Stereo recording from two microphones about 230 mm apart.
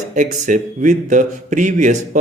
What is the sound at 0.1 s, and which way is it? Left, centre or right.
A man's voice, right.